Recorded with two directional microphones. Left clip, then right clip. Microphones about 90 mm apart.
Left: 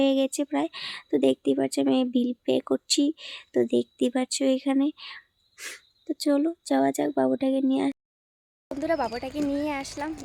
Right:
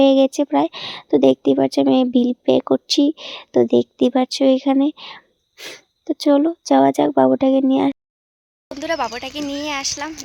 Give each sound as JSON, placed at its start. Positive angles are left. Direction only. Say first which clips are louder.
{"t": 0.0, "sound": "speech", "louder": "right 10 dB", "side_deg": -40}
{"t": 5.5, "sound": "speech", "louder": "right 5 dB", "side_deg": -15}
{"t": 6.1, "sound": "speech", "louder": "right 9 dB", "side_deg": -35}
{"t": 9.0, "sound": "speech", "louder": "right 3 dB", "side_deg": 0}